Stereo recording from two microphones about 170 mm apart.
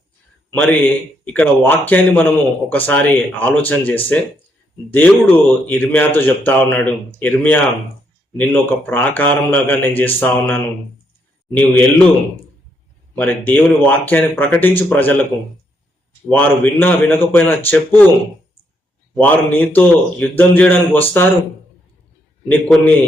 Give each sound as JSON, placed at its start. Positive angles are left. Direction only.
{"t": 0.5, "sound": "speech", "side_deg": 10}
{"t": 13.1, "sound": "speech", "side_deg": 10}
{"t": 16.6, "sound": "speech", "side_deg": 10}
{"t": 19.1, "sound": "speech", "side_deg": 10}
{"t": 22.4, "sound": "speech", "side_deg": 10}